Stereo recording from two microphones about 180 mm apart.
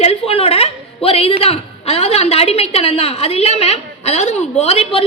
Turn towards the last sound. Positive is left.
turn(degrees=35)  # may be behind; listen again after turning